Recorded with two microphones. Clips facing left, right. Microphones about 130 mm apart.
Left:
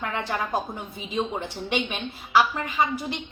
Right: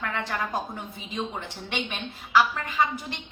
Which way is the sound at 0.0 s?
20° left (ahead or behind).